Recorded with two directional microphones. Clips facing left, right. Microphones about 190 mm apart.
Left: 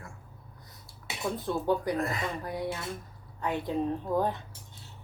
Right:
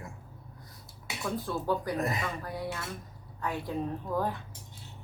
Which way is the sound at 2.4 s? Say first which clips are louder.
Left 3 dB; 20° left (ahead or behind).